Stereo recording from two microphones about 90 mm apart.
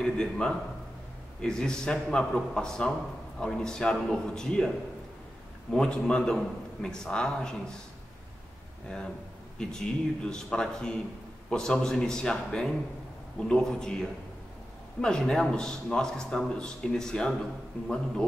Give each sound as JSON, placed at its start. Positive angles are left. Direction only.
{"t": 0.0, "sound": "a man's voice", "side_deg": 10}
{"t": 5.7, "sound": "a man's voice", "side_deg": 5}
{"t": 9.6, "sound": "a man's voice", "side_deg": 10}